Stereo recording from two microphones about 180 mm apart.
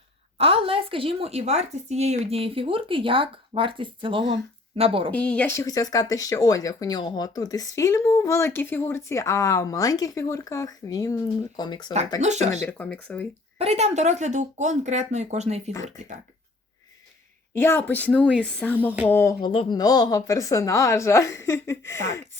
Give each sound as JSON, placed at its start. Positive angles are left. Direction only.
{"t": 0.3, "sound": "a woman's voice", "side_deg": -30}
{"t": 5.1, "sound": "speech", "side_deg": 5}
{"t": 12.2, "sound": "speech", "side_deg": -40}
{"t": 12.6, "sound": "a woman's voice", "side_deg": 10}
{"t": 13.6, "sound": "speech", "side_deg": -35}
{"t": 17.5, "sound": "a woman's voice", "side_deg": 15}
{"t": 19.5, "sound": "a woman's voice", "side_deg": 25}